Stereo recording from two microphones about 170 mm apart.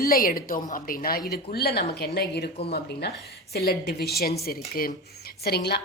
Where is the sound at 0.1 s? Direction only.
60° left (ahead or behind).